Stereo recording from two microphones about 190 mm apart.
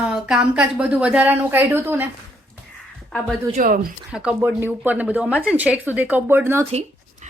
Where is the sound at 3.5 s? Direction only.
45° right (ahead or behind).